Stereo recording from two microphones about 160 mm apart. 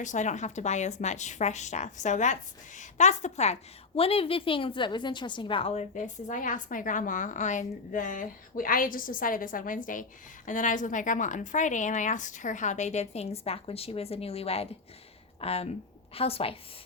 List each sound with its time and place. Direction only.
0.0 s a woman's voice: 50° left (ahead or behind)
5.9 s a woman's voice: 50° left (ahead or behind)